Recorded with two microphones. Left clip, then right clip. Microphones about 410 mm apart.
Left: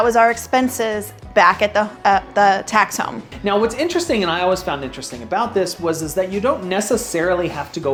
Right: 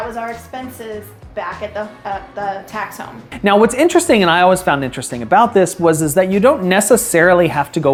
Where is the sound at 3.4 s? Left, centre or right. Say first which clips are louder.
Right 6 dB; right.